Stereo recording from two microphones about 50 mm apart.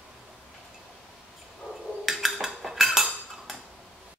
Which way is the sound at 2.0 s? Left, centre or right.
Centre.